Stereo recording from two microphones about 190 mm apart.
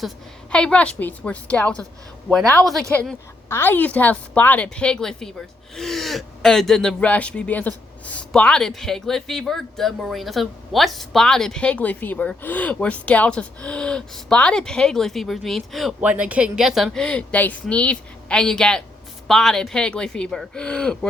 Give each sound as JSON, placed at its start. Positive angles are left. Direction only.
{"t": 0.5, "sound": "a woman's voice", "side_deg": 5}